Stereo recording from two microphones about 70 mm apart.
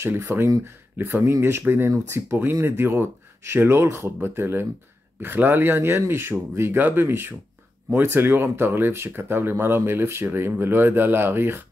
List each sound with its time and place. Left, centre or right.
0.0 s speech: right